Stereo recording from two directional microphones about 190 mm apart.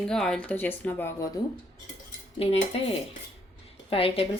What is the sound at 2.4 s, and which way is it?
Speech, 30° left (ahead or behind).